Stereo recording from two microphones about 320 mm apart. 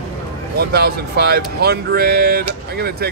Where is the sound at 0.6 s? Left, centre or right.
Right.